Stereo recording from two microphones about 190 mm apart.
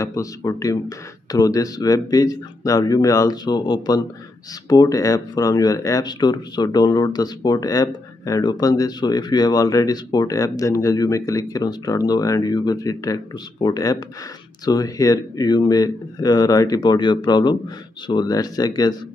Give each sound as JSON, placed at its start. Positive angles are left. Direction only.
{"t": 0.0, "sound": "speech", "side_deg": 15}